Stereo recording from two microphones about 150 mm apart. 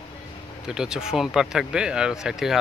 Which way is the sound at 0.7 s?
5° right (ahead or behind).